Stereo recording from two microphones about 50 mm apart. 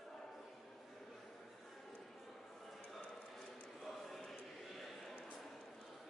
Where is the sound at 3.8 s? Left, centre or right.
Centre.